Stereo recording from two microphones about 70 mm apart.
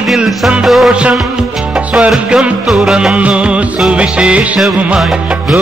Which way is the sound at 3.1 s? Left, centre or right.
Centre.